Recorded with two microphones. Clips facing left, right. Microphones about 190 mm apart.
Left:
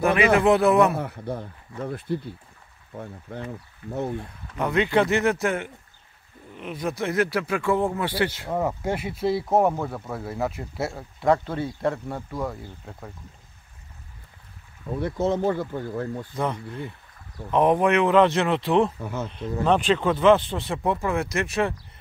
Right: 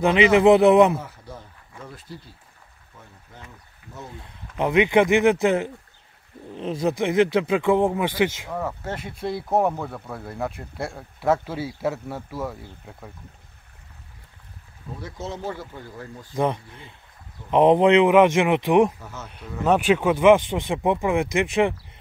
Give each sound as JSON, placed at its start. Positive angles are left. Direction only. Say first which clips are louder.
{"t": 0.4, "sound": "speech", "louder": "right 7 dB", "side_deg": -20}
{"t": 0.9, "sound": "speech", "louder": "left 5 dB", "side_deg": 60}
{"t": 4.6, "sound": "speech", "louder": "right 3 dB", "side_deg": -20}
{"t": 8.5, "sound": "speech", "louder": "left 4 dB", "side_deg": 20}
{"t": 15.0, "sound": "speech", "louder": "left 10 dB", "side_deg": 55}
{"t": 16.3, "sound": "speech", "louder": "right 5 dB", "side_deg": -20}
{"t": 18.9, "sound": "speech", "louder": "left 8 dB", "side_deg": 55}
{"t": 19.6, "sound": "speech", "louder": "right 2 dB", "side_deg": -10}